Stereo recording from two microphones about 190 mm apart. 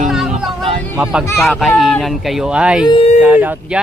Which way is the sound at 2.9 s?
30° left (ahead or behind).